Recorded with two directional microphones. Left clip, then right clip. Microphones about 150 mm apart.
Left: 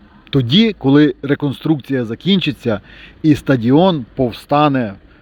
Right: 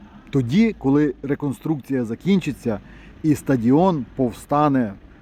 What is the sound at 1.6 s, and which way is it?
Speech, 40° left (ahead or behind).